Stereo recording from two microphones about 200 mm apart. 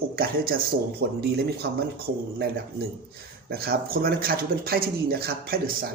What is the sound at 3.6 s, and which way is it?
Speech, 50° right (ahead or behind).